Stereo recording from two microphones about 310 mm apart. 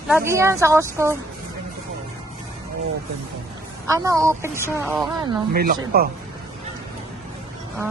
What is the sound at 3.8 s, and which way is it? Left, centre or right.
A woman's voice, centre.